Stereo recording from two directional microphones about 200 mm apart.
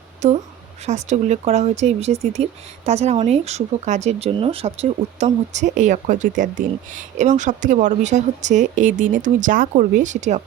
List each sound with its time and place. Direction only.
0.2 s speech: 35° right (ahead or behind)